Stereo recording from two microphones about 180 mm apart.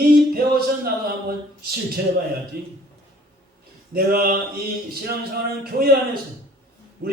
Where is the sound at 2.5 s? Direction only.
60° right (ahead or behind).